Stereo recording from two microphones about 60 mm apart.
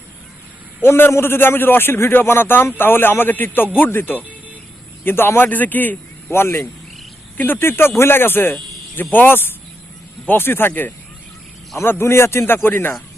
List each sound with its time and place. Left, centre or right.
0.8 s a man's voice: left
6.3 s a man's voice: left
11.8 s a man's voice: left